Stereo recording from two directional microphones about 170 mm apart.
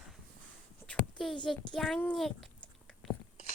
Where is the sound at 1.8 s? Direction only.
5° left (ahead or behind).